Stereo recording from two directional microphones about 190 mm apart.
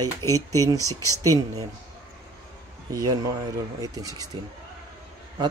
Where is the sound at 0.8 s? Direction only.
15° left (ahead or behind).